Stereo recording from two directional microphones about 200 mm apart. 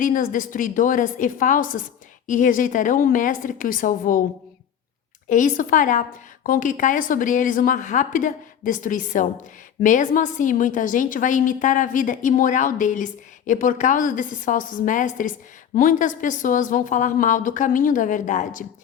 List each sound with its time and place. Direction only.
0.0 s a woman's voice: 40° left (ahead or behind)
5.3 s a woman's voice: 40° left (ahead or behind)